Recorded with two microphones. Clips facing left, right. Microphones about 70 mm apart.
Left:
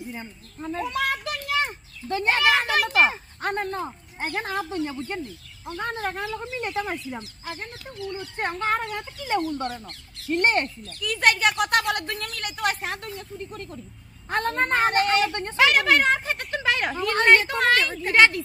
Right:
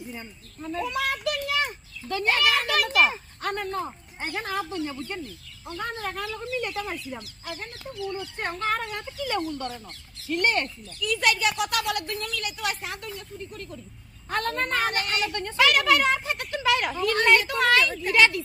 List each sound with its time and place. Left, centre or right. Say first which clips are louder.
0.1 s speech: left 2 dB; left
9.6 s speech: left 3 dB; left
10.3 s a woman's voice: left 3 dB; left
10.8 s speech: left 2 dB; left
14.3 s a woman's voice: left 3 dB; left